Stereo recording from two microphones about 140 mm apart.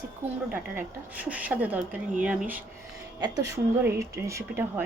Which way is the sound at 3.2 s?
25° right (ahead or behind).